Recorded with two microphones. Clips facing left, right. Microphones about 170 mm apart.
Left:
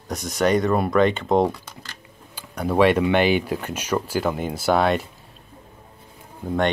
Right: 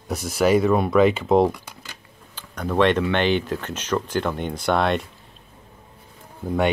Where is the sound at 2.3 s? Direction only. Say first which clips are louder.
Left 2 dB; 10° left (ahead or behind).